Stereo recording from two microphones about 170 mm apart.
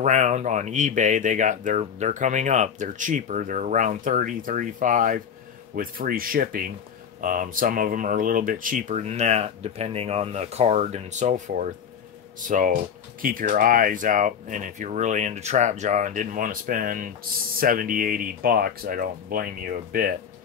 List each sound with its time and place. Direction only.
0.0 s speech: 45° right (ahead or behind); by 20.2 s 60° right (ahead or behind)